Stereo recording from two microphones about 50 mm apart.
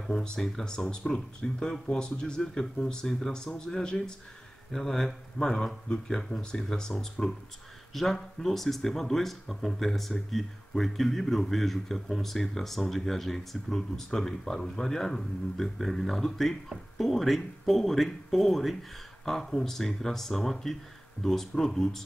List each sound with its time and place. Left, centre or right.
0.0 s speech: centre
2.4 s speech: centre